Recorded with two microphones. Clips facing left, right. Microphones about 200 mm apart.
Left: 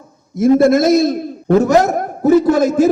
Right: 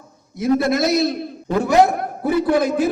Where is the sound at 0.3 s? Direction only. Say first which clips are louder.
Left 7 dB; 50° left (ahead or behind).